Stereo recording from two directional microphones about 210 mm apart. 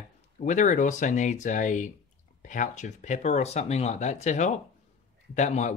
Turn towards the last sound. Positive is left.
turn(degrees=35)  # may be behind; listen again after turning